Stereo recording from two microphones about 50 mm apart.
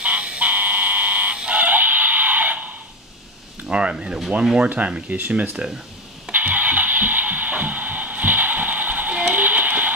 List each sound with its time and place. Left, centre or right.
0.0 s a sound: right
3.7 s speech: right
6.3 s music: right